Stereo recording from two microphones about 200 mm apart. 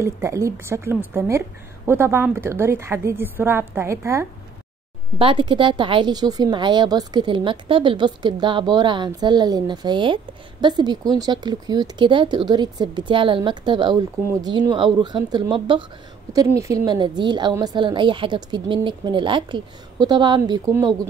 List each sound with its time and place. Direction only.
0.0 s a woman's voice: 15° right (ahead or behind)
5.2 s a woman's voice: 25° right (ahead or behind)